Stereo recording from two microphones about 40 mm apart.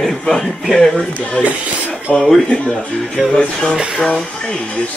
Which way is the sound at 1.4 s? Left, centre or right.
Right.